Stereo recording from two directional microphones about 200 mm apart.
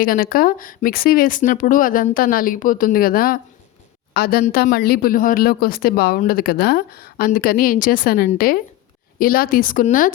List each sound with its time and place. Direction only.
0.0 s a woman's voice: 45° left (ahead or behind)